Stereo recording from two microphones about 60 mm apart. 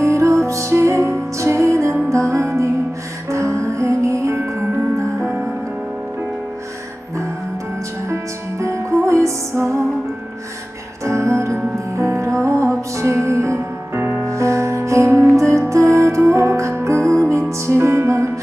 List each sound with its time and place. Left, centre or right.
0.0 s music: right
5.2 s music: right
8.1 s music: right
11.0 s music: right
14.0 s music: right
14.3 s music: right
17.7 s music: right